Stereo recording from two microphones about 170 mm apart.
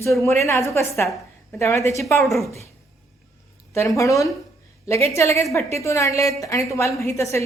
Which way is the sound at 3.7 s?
15° left (ahead or behind).